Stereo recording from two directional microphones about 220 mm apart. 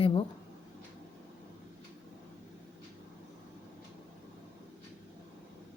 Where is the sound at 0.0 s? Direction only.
25° left (ahead or behind).